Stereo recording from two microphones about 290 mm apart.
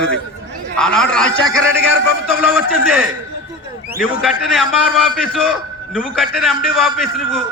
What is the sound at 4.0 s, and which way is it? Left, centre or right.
A man's voice, centre.